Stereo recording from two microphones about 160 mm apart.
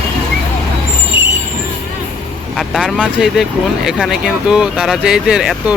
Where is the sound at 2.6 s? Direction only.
Centre (ahead or behind).